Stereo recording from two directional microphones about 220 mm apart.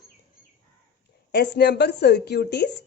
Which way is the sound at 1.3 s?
50° left (ahead or behind).